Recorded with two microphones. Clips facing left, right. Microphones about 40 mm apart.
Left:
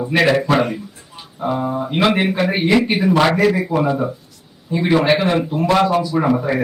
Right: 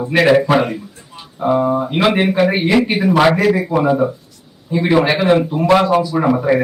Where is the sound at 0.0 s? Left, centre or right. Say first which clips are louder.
Right 3 dB; centre.